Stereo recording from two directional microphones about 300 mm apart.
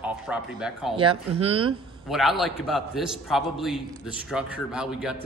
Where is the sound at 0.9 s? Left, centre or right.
Centre.